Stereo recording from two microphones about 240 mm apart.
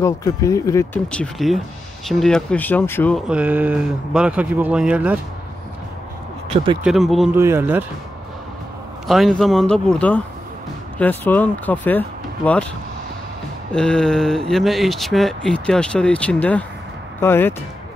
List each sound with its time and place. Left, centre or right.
0.0 s speech: centre
3.3 s speech: centre
6.5 s speech: right
6.8 s speech: centre
9.0 s speech: centre
13.7 s speech: centre